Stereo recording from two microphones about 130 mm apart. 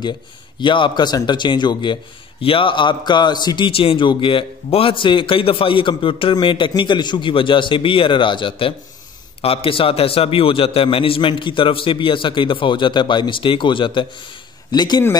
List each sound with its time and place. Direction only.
0.6 s a man's voice: 40° left (ahead or behind)